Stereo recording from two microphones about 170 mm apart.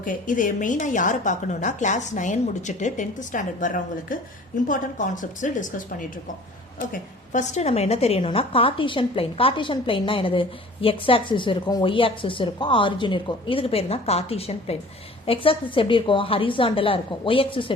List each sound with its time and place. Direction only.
0.0 s a woman's voice: 50° left (ahead or behind); by 17.7 s 30° left (ahead or behind)